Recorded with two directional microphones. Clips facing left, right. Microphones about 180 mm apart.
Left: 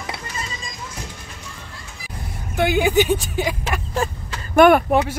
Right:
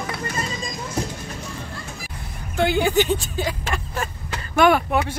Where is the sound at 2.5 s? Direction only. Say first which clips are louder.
Left 2 dB; 15° left (ahead or behind).